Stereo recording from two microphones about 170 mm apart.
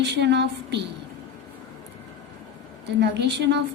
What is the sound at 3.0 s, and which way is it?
Speech, 90° right.